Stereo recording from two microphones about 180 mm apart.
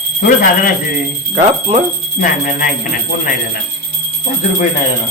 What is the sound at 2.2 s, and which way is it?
Speech, 50° left (ahead or behind).